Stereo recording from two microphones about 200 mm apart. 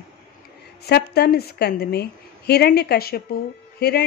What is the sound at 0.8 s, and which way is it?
A woman's voice, 55° left (ahead or behind).